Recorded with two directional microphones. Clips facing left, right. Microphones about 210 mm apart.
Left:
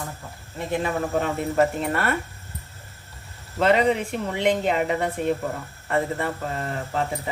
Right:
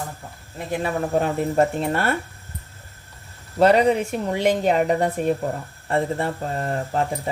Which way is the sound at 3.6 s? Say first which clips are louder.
Right 3 dB; 40° right (ahead or behind).